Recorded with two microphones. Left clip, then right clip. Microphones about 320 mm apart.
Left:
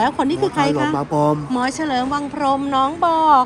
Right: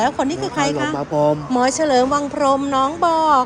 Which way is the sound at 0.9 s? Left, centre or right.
Left.